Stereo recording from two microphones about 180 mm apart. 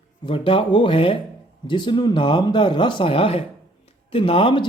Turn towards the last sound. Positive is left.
turn(degrees=30)  # may be behind; listen again after turning